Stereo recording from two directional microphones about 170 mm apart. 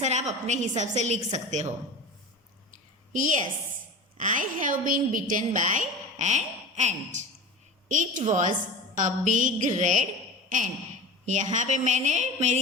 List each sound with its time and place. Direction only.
0.0 s a woman's voice: 45° right (ahead or behind)
2.7 s a sound: 50° right (ahead or behind)
4.2 s a woman's voice: 50° right (ahead or behind)
11.3 s a woman's voice: 45° right (ahead or behind)